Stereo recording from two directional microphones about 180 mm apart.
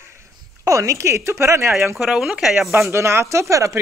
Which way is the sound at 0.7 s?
15° right (ahead or behind).